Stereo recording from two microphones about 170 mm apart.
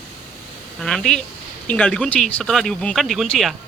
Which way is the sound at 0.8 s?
5° left (ahead or behind).